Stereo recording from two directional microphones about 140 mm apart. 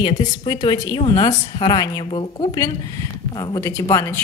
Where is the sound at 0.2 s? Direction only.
30° left (ahead or behind).